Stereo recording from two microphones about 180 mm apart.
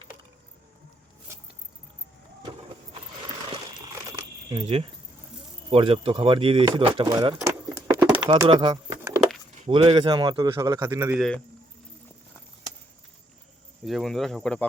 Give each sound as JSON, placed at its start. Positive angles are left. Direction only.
{"t": 4.1, "sound": "keys jangling", "side_deg": -20}
{"t": 5.7, "sound": "speech", "side_deg": -30}
{"t": 7.7, "sound": "a sound", "side_deg": -10}
{"t": 8.3, "sound": "speech", "side_deg": -25}
{"t": 13.8, "sound": "speech", "side_deg": 0}